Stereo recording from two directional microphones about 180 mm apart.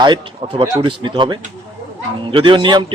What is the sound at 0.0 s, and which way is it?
A man's voice, 25° right (ahead or behind).